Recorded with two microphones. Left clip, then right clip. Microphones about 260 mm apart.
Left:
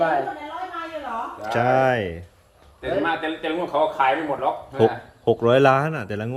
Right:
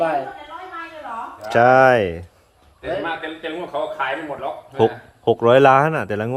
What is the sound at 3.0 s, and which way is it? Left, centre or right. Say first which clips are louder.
Speech: left 2 dB; left.